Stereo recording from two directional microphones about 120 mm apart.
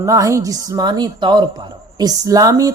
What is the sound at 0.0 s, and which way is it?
Speech, 25° right (ahead or behind).